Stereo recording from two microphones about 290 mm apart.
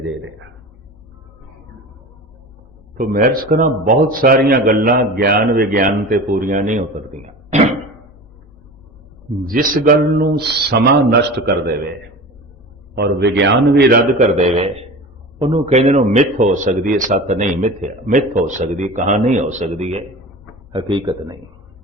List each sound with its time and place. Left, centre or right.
3.0 s speech: right
9.5 s a man's voice: right
13.0 s a man's voice: right; by 21.3 s centre